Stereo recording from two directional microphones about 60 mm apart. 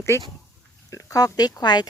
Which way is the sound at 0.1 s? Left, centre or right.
Left.